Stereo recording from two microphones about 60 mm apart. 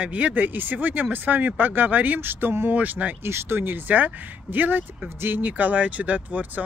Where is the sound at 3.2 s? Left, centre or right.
Right.